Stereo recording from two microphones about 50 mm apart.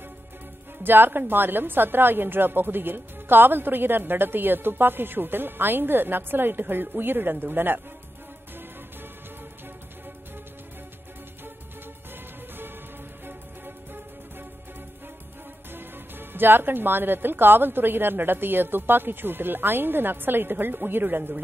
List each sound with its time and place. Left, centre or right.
0.8 s a woman's voice: right
15.7 s a woman's voice: right